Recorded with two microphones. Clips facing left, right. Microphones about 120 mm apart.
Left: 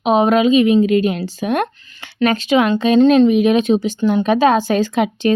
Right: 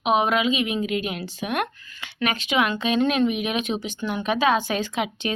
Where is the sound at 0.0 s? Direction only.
35° left (ahead or behind).